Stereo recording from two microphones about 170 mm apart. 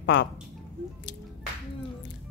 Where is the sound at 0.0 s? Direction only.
90° left.